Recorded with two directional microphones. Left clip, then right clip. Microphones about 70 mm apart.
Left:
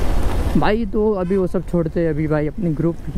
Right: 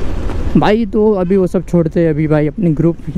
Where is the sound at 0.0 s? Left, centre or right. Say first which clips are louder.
Right 1 dB; left.